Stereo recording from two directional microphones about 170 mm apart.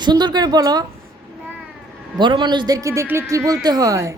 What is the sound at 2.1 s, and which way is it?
A man's voice, 30° right (ahead or behind).